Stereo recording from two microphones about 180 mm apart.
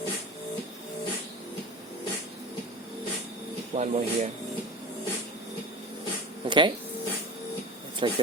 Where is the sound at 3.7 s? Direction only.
40° right (ahead or behind).